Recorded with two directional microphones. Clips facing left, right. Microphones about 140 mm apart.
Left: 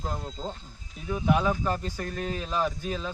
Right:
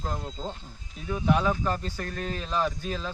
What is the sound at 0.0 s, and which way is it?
Speech, 5° left (ahead or behind).